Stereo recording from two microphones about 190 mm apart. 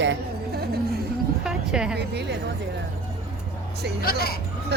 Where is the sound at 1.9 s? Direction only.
60° right (ahead or behind).